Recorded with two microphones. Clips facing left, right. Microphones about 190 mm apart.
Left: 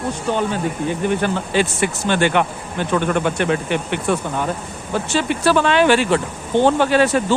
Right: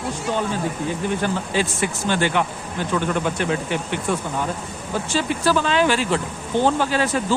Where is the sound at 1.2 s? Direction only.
65° left (ahead or behind).